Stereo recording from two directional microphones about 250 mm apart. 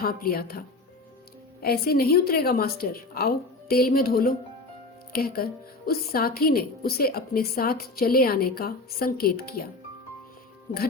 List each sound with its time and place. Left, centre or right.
0.0 s a woman's voice: left
1.6 s a woman's voice: left